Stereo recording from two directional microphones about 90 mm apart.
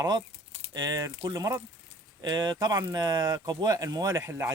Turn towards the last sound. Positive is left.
turn(degrees=-30)  # may be behind; listen again after turning